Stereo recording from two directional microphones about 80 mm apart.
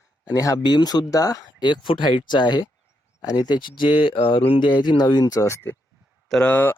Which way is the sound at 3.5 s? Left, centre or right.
Left.